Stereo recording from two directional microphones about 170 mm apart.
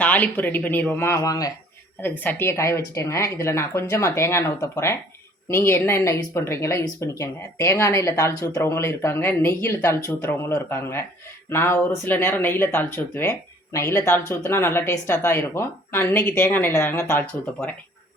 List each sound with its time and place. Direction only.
0.0 s speech: 10° left (ahead or behind)